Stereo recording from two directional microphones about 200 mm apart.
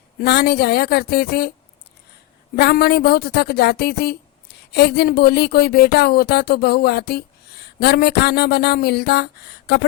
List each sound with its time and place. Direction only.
0.2 s speech: 55° left (ahead or behind)
2.6 s speech: 55° left (ahead or behind)